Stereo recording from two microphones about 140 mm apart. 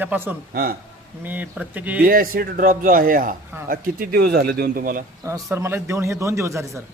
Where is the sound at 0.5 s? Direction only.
90° right.